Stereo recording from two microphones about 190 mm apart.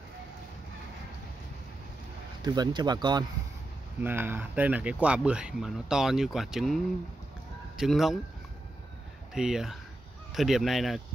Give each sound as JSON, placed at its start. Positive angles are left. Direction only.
{"t": 2.4, "sound": "speech", "side_deg": -20}
{"t": 4.0, "sound": "speech", "side_deg": -10}
{"t": 9.3, "sound": "speech", "side_deg": -5}